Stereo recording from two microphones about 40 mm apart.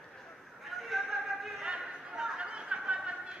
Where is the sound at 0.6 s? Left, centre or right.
Centre.